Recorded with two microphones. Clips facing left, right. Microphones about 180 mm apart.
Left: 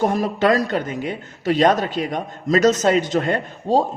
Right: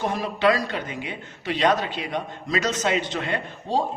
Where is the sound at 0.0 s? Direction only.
45° left (ahead or behind).